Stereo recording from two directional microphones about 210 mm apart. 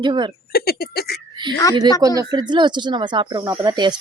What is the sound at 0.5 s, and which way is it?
Speech, 45° left (ahead or behind).